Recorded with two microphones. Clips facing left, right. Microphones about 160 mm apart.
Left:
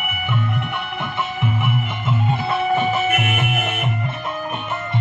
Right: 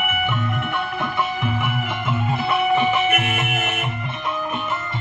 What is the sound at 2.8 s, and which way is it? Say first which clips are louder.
Music: even; 40° left (ahead or behind).